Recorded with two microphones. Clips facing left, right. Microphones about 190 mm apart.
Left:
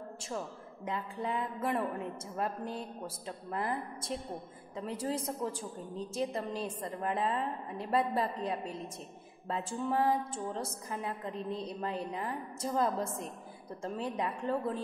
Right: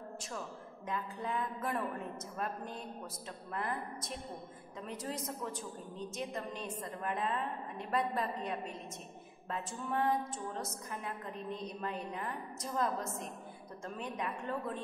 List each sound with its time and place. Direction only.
0.8 s a woman's voice: 25° left (ahead or behind)